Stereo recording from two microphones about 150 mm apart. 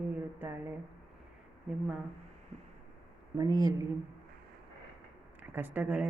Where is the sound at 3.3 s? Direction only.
25° right (ahead or behind).